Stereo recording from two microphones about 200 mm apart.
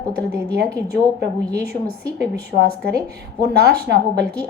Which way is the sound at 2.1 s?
50° right (ahead or behind).